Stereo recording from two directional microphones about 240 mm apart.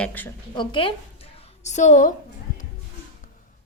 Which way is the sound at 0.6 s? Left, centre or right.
Left.